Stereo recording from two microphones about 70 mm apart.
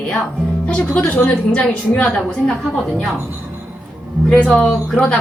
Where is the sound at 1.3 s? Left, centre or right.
Centre.